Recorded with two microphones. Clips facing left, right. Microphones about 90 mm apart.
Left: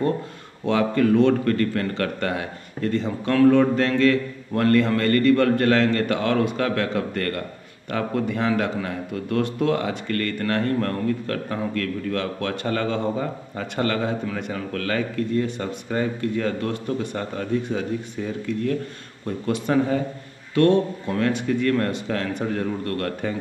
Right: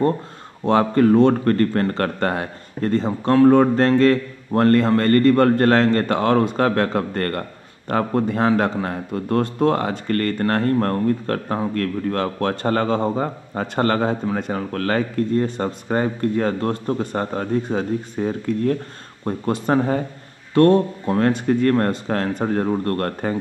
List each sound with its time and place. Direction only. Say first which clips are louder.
0.7 s a man's voice: right 4 dB; 40° right (ahead or behind)